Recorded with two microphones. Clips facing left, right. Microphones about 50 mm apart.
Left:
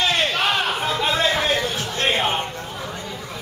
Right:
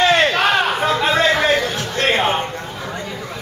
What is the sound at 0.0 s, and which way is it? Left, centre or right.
Crowd, right.